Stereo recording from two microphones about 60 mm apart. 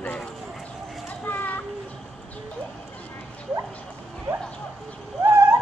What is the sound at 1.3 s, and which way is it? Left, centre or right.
Children playing, left.